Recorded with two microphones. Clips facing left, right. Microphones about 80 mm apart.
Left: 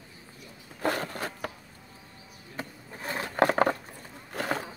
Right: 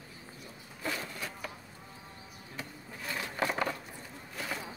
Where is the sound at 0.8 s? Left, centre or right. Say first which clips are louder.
Left 8 dB; left.